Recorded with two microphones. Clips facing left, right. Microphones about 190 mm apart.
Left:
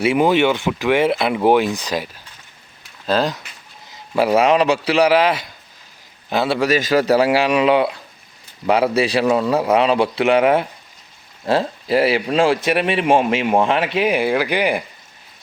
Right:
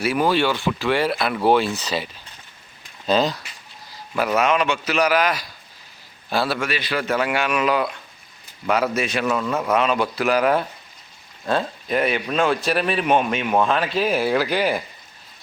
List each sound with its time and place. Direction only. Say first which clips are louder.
0.0 s speech: left 5 dB; 25° left (ahead or behind)
3.1 s speech: left 1 dB; 5° left (ahead or behind)
4.1 s a man's voice: left 5 dB; 30° left (ahead or behind)
6.6 s a man's voice: left 9 dB; 45° left (ahead or behind); by 14.8 s 15° left (ahead or behind)